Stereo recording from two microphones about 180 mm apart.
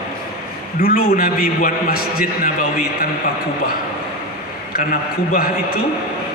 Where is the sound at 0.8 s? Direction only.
55° left (ahead or behind).